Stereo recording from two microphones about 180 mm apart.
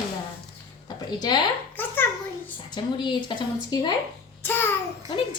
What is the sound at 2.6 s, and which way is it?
A woman's voice, 25° left (ahead or behind).